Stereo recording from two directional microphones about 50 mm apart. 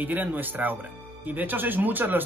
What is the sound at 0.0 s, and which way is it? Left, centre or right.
Speech, right.